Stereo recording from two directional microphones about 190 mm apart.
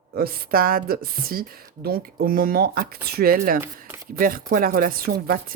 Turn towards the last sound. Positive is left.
turn(degrees=-50)  # may be behind; listen again after turning